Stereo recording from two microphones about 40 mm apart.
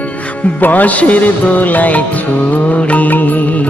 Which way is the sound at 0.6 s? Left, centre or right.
Left.